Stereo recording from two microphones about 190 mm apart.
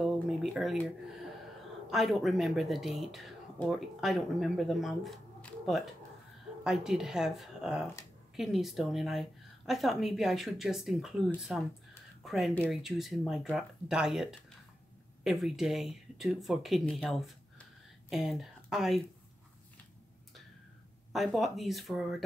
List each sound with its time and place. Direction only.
0.0 s speech: centre (ahead or behind)
21.1 s speech: centre (ahead or behind)